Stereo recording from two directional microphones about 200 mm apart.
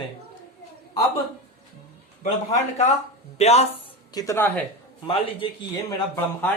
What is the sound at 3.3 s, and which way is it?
Speech, 30° left (ahead or behind).